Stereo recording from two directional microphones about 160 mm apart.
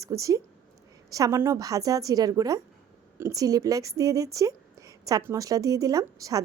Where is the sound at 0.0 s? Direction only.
20° right (ahead or behind).